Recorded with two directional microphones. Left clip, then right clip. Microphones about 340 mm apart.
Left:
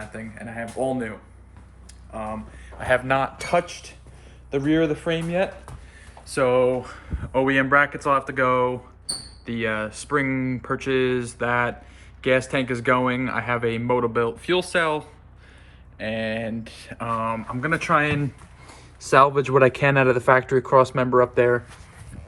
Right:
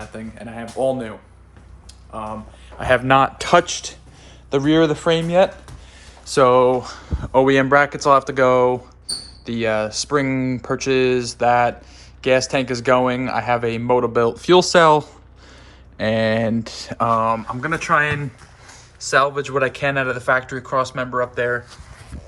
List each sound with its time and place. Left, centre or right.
0.3 s speech: centre
2.1 s speech: centre
2.7 s speech: right; by 18.3 s centre
18.7 s speech: centre